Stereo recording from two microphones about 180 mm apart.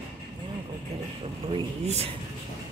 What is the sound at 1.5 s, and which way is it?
Speech, 35° right (ahead or behind).